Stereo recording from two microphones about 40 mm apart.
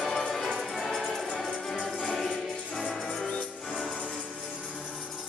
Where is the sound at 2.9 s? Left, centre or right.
Centre.